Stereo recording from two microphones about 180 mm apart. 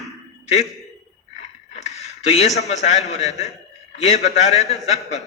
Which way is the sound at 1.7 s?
35° left (ahead or behind).